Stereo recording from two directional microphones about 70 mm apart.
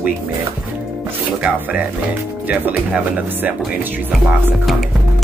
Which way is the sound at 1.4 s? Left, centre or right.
Centre.